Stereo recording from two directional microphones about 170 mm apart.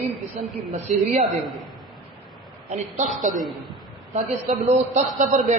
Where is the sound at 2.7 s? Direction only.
45° right (ahead or behind).